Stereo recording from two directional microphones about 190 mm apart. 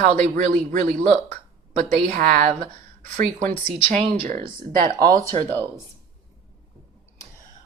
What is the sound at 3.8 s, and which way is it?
Speech, 35° right (ahead or behind).